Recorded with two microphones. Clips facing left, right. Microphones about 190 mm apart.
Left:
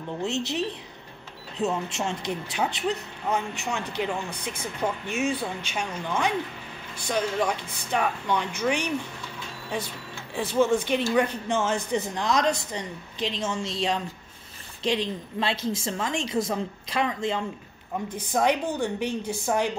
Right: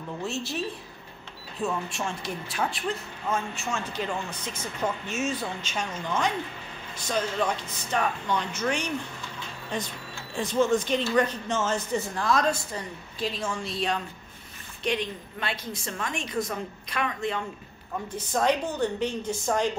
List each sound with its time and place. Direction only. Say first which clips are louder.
0.2 s a woman's voice: left 4 dB; 20° left (ahead or behind)
10.3 s a woman's voice: left 1 dB; 10° left (ahead or behind)
14.8 s a woman's voice: left 2 dB; 30° left (ahead or behind)
18.1 s speech: left 1 dB; 10° left (ahead or behind)